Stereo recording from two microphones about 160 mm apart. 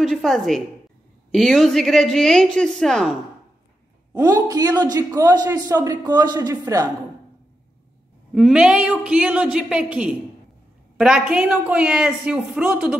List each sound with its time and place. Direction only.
0.0 s a woman's voice: centre (ahead or behind)
4.1 s a man's voice: 25° right (ahead or behind)
8.4 s a woman's voice: 5° right (ahead or behind)